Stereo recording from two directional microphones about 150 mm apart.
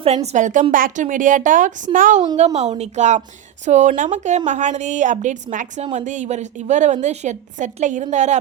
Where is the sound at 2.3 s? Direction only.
50° right (ahead or behind).